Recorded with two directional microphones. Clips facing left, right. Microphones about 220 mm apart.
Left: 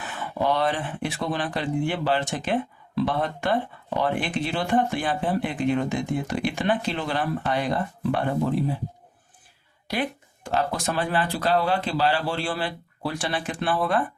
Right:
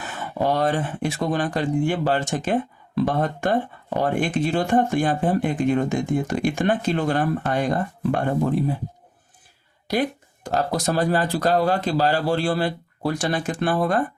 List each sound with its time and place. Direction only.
0.0 s speech: 45° right (ahead or behind)
9.8 s speech: 40° right (ahead or behind)